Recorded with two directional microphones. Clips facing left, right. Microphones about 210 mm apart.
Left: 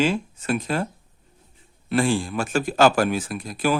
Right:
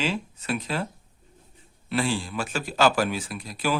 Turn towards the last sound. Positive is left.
turn(degrees=50)  # may be behind; listen again after turning